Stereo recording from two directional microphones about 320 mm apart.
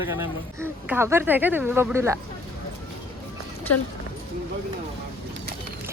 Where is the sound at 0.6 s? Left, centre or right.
Centre.